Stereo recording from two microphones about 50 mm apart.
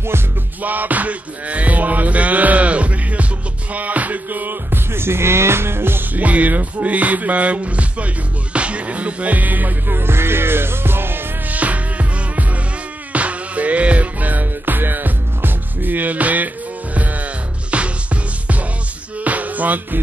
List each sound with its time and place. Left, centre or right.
0.6 s music: right
6.1 s music: right
9.9 s music: right
11.5 s music: right
17.6 s music: right